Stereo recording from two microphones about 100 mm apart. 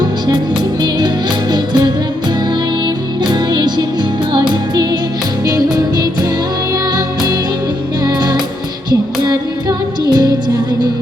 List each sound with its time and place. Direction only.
0.8 s music: 45° right (ahead or behind)